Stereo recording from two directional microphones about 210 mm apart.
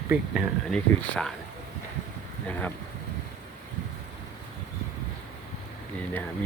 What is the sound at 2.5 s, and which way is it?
Speech, 10° left (ahead or behind).